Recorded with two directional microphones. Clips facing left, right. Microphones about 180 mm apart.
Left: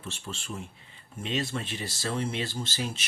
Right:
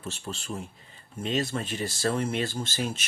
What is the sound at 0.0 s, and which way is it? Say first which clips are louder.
Speech: right 3 dB; 40° right (ahead or behind).